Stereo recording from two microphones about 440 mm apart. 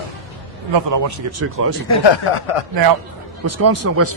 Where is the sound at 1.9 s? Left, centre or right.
Left.